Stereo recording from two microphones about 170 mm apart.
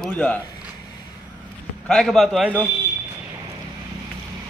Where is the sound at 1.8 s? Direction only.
Centre (ahead or behind).